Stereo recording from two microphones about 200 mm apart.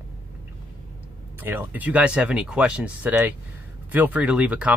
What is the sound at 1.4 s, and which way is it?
Speech, 10° right (ahead or behind).